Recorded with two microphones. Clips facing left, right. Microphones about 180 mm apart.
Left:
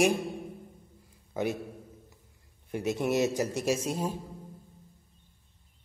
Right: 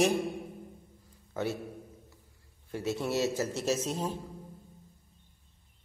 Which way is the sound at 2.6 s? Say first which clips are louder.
Left 3 dB; 15° left (ahead or behind).